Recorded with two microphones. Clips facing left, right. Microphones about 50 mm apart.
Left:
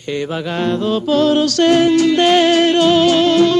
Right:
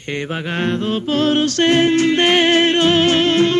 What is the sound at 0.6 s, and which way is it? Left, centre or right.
Music, right.